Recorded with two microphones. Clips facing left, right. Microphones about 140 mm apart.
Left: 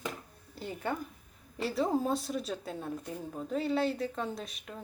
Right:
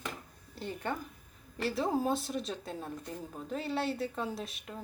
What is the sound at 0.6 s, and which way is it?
Speech, 5° left (ahead or behind).